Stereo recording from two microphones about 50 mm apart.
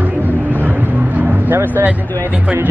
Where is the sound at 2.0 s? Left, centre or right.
Left.